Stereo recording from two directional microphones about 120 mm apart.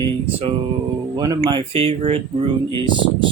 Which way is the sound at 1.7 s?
55° right (ahead or behind).